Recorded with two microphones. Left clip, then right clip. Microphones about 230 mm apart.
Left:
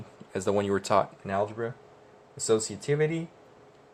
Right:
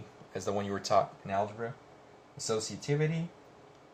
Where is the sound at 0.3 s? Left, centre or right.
Left.